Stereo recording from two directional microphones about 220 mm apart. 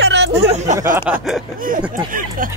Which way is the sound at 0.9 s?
5° right (ahead or behind).